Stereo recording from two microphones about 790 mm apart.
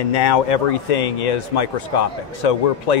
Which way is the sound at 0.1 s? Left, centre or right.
Left.